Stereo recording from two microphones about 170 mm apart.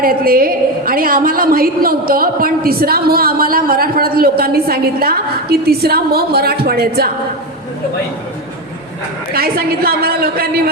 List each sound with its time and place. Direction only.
0.0 s a woman's voice: 60° right (ahead or behind)
9.3 s a woman's voice: 65° right (ahead or behind)